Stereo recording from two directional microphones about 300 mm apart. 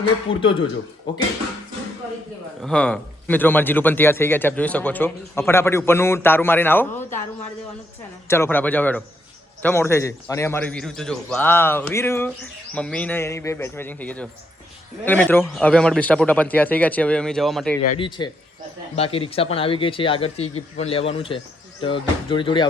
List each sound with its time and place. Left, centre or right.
0.3 s a man's voice: centre
2.6 s a man's voice: centre
8.3 s a man's voice: centre
17.8 s a man's voice: centre